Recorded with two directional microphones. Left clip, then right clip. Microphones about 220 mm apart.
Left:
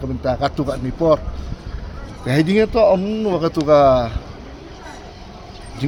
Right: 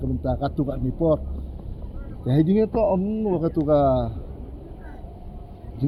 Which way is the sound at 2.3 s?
15° left (ahead or behind).